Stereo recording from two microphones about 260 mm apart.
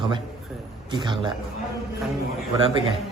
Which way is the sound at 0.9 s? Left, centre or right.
Centre.